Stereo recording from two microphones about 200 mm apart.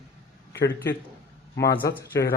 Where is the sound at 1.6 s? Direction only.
50° left (ahead or behind).